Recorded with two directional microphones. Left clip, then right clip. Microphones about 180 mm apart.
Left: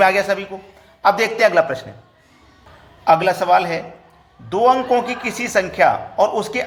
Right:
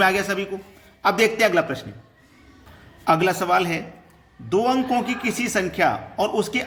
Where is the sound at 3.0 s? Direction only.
15° right (ahead or behind).